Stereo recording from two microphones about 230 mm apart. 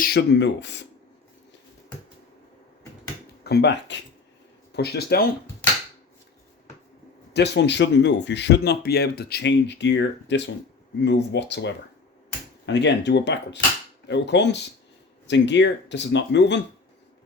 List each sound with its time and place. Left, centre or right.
0.0 s speech: left
3.4 s speech: left
7.3 s speech: left